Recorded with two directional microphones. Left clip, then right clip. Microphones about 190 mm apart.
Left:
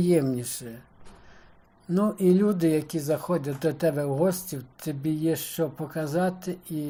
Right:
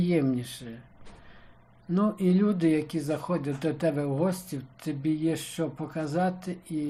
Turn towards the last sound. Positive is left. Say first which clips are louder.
# left 1 dB
turn(degrees=25)  # may be behind; listen again after turning